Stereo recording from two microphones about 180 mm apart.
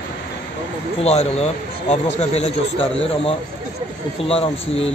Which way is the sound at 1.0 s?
35° left (ahead or behind).